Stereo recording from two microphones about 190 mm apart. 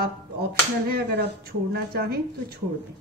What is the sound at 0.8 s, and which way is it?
A woman's voice, 55° right (ahead or behind).